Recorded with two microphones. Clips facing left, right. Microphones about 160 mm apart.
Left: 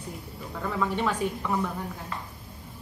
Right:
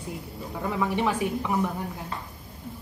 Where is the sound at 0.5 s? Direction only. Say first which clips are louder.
Right 2 dB; 15° right (ahead or behind).